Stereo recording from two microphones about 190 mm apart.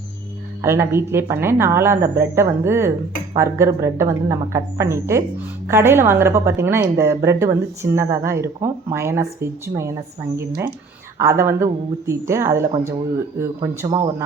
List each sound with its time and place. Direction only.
0.6 s a woman's voice: 15° right (ahead or behind)
11.2 s a woman's voice: 15° right (ahead or behind)